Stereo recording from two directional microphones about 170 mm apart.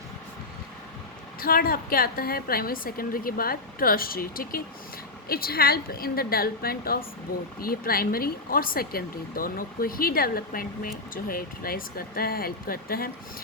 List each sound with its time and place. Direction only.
1.4 s speech: 60° left (ahead or behind)